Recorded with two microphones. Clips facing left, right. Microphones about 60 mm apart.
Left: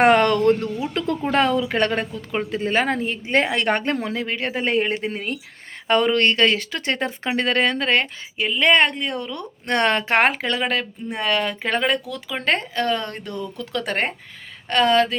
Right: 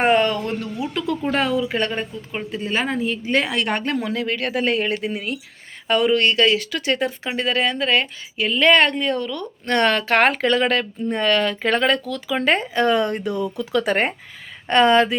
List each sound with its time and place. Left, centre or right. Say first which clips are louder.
0.0 s speech: left 3 dB; left
0.6 s a woman's voice: left 1 dB; left
3.2 s a woman's voice: left 3 dB; left
8.4 s speech: right 2 dB; centre
10.3 s speech: right 4 dB; centre
12.3 s speech: right 3 dB; centre
12.7 s speech: right 5 dB; centre
14.7 s speech: right 2 dB; right